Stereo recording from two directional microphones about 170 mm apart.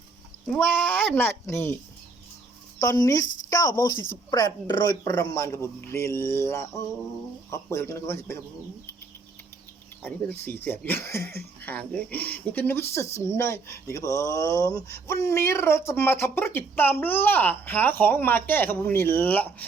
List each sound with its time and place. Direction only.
0.4 s speech: 5° left (ahead or behind)
2.8 s a woman's voice: 20° left (ahead or behind)
10.0 s speech: 10° left (ahead or behind)